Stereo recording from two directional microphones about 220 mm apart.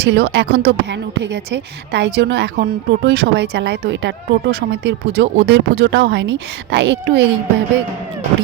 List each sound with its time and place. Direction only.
0.0 s speech: 50° right (ahead or behind)